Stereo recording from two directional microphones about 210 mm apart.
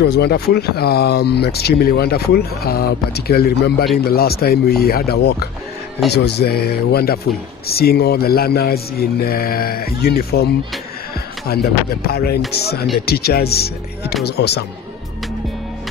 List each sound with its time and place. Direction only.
0.0 s speech: 50° left (ahead or behind)